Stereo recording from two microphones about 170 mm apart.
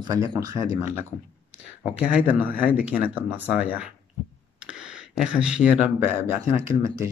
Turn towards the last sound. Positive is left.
turn(degrees=-20)  # may be behind; listen again after turning